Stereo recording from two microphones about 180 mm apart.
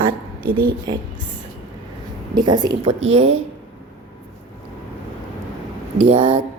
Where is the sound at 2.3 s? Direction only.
25° right (ahead or behind).